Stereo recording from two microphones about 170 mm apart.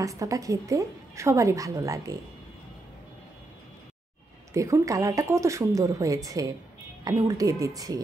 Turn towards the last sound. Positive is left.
turn(degrees=-20)  # may be behind; listen again after turning